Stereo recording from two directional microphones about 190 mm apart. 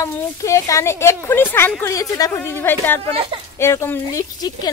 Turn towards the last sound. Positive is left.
turn(degrees=20)  # may be behind; listen again after turning